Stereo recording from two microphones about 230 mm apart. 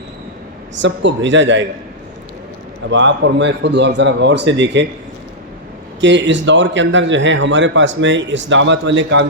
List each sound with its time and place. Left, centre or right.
0.8 s a man's voice: right
2.9 s a man's voice: right
6.0 s a man's voice: right